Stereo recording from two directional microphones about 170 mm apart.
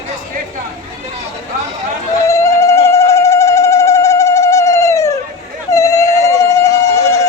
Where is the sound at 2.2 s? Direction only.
15° left (ahead or behind).